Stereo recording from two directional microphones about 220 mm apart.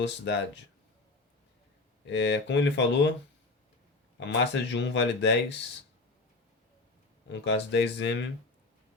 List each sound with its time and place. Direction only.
0.0 s speech: 55° left (ahead or behind)
2.0 s speech: 55° left (ahead or behind)
4.2 s speech: 55° left (ahead or behind)
7.3 s speech: 55° left (ahead or behind)